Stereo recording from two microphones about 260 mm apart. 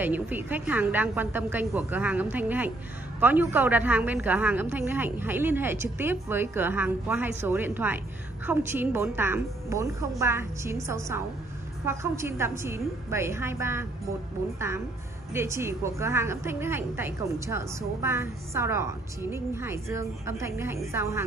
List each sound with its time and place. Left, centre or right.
0.0 s a woman's voice: centre
15.3 s a woman's voice: centre